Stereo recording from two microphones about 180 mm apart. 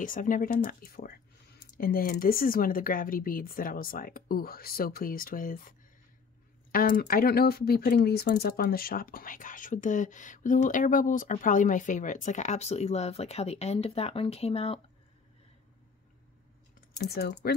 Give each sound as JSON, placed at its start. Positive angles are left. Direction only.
{"t": 0.0, "sound": "speech", "side_deg": 50}
{"t": 17.1, "sound": "speech", "side_deg": 60}